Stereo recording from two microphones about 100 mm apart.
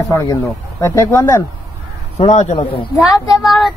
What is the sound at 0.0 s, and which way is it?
Speech, 35° left (ahead or behind).